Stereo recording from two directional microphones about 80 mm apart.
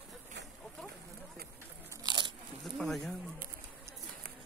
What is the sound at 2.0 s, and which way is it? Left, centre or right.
Biting, right.